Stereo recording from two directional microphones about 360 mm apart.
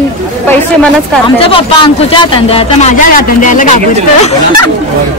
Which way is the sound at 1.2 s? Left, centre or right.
Centre.